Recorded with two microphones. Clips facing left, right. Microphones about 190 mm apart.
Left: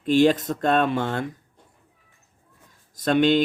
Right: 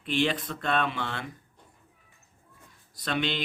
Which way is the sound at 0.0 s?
40° left (ahead or behind).